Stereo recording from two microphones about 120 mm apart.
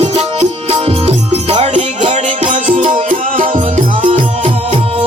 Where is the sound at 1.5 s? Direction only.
75° right (ahead or behind).